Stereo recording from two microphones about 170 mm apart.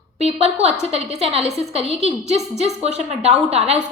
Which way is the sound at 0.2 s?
35° right (ahead or behind).